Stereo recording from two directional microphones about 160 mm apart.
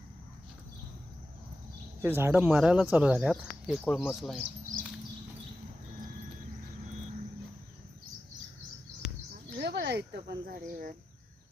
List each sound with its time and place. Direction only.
2.0 s speech: 15° right (ahead or behind)
9.6 s speech: 90° right; by 10.9 s 65° right (ahead or behind)